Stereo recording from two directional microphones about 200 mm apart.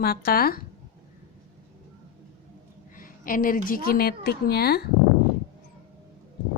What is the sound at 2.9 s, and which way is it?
A woman's voice, 45° left (ahead or behind).